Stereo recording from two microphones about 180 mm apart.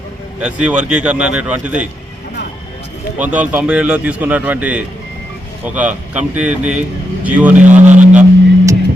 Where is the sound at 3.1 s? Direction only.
10° right (ahead or behind).